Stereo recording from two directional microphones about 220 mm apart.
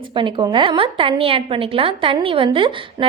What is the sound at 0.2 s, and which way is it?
A woman's voice, 20° right (ahead or behind).